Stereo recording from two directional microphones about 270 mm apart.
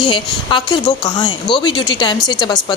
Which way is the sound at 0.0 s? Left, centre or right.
Centre.